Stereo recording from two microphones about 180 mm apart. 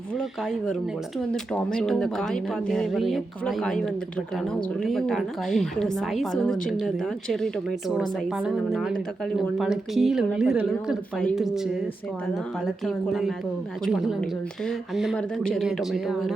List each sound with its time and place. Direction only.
1.3 s speech: 5° left (ahead or behind)
12.6 s speech: centre (ahead or behind)